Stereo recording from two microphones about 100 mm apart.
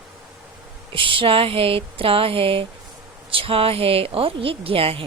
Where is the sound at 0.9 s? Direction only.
60° right (ahead or behind).